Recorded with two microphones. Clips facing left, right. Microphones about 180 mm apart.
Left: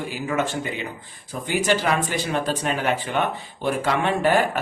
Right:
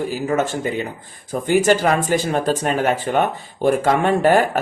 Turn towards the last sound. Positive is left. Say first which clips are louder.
# right 5 dB
turn(degrees=-45)  # may be behind; listen again after turning